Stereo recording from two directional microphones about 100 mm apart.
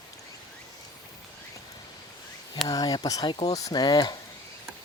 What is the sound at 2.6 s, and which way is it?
Speech, 40° left (ahead or behind).